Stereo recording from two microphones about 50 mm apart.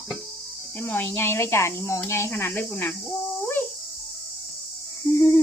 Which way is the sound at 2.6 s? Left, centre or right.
Left.